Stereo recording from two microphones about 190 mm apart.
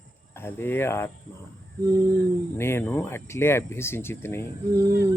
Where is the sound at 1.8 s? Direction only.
20° right (ahead or behind).